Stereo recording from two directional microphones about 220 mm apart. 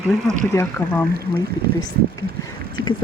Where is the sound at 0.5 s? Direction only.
10° left (ahead or behind).